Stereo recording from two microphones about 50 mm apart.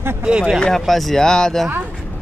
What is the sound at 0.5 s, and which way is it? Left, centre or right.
Speech, centre.